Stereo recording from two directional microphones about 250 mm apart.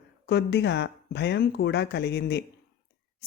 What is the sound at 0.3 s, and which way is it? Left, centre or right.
Speech, left.